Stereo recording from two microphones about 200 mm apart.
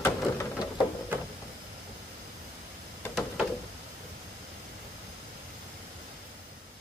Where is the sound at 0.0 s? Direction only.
15° left (ahead or behind).